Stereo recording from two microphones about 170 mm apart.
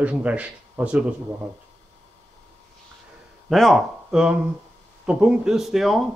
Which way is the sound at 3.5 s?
Centre (ahead or behind).